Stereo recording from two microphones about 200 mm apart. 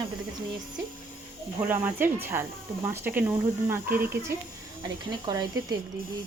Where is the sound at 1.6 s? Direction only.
10° right (ahead or behind).